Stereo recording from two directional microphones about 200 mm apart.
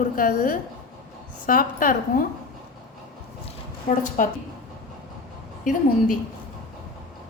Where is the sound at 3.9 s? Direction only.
40° left (ahead or behind).